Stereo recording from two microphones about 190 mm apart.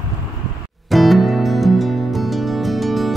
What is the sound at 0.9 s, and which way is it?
Music, centre (ahead or behind).